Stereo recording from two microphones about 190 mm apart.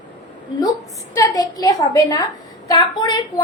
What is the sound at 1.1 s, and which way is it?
A woman's voice, 20° left (ahead or behind).